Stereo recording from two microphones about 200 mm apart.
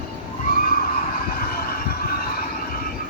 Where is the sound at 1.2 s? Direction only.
50° left (ahead or behind).